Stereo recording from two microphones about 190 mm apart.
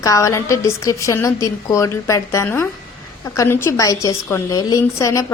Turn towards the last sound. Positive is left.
turn(degrees=15)  # may be behind; listen again after turning